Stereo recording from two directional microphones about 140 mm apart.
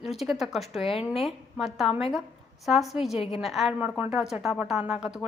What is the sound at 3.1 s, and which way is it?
Speech, 45° left (ahead or behind).